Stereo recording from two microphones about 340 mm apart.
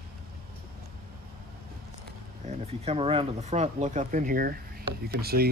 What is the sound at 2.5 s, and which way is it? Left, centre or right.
Speech, centre.